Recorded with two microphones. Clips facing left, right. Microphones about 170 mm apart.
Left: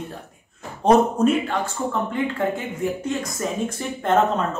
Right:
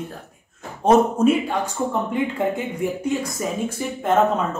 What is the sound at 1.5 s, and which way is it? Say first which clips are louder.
Speech: right 1 dB; 15° right (ahead or behind).